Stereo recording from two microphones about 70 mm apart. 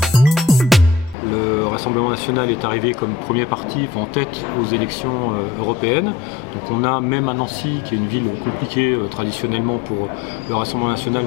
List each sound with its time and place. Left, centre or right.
0.0 s music: centre
1.3 s music: centre
1.9 s speech: centre
5.8 s speech: centre
8.7 s speech: centre
10.5 s speech: centre